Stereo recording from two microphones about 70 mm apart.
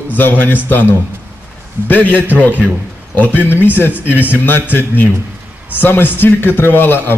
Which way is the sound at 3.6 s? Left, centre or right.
Left.